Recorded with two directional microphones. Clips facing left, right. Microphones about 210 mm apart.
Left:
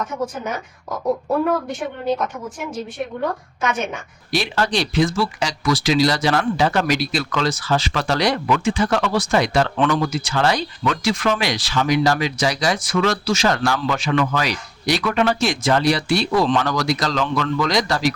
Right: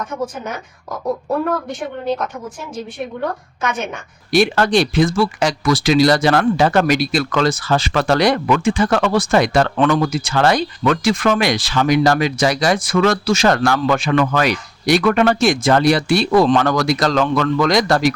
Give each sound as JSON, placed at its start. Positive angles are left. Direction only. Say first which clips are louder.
{"t": 4.3, "sound": "speech", "louder": "right 7 dB", "side_deg": -55}